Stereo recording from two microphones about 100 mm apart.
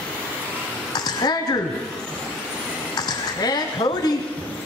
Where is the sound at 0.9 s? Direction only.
45° left (ahead or behind).